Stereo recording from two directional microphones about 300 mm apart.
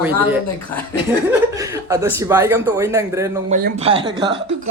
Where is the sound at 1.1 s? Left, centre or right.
Centre.